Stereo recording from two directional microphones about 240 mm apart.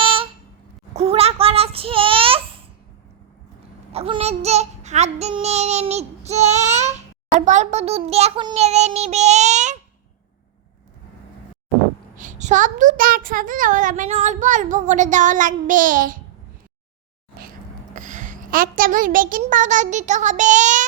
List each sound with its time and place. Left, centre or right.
0.0 s a sound: right
0.9 s child singing: right
3.9 s child singing: right
7.3 s a child's voice: right
12.1 s a child's voice: right
17.9 s a child's voice: right